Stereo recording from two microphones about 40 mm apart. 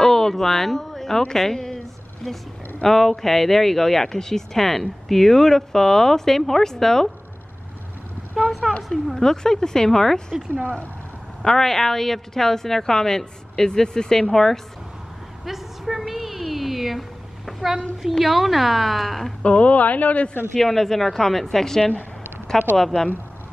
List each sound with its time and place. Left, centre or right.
0.0 s a sound: centre
1.4 s a woman's voice: centre
2.8 s speech: centre
8.5 s a woman's voice: centre
9.1 s speech: centre
11.4 s speech: centre
15.4 s a sound: centre
17.5 s a child's voice: centre
19.4 s speech: left
20.5 s speech: centre